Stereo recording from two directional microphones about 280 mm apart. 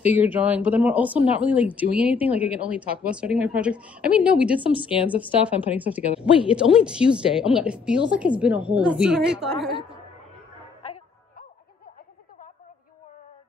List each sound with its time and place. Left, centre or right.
0.0 s a woman's voice: centre
9.7 s a woman's voice: centre